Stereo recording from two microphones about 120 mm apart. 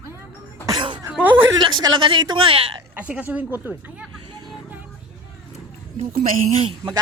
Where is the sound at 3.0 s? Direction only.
15° right (ahead or behind).